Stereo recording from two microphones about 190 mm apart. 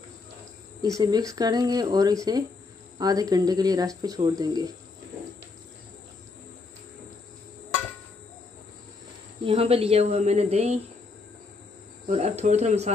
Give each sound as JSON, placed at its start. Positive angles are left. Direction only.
{"t": 0.8, "sound": "speech", "side_deg": -20}
{"t": 9.4, "sound": "a woman's voice", "side_deg": -30}
{"t": 12.1, "sound": "a woman's voice", "side_deg": -35}